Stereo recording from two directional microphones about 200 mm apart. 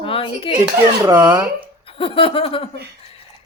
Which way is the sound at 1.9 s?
25° left (ahead or behind).